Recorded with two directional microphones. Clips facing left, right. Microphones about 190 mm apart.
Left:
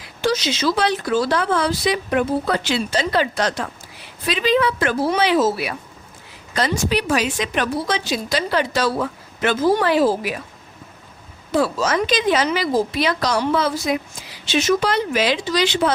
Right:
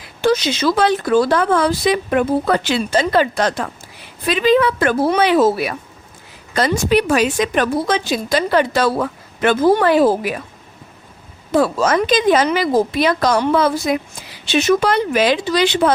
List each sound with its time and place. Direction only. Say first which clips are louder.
0.2 s a woman's voice: right 4 dB; 55° right (ahead or behind)
11.5 s a woman's voice: right 4 dB; 50° right (ahead or behind)